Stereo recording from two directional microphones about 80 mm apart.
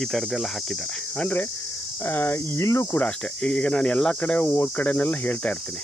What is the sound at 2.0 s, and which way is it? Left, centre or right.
Cricket, left.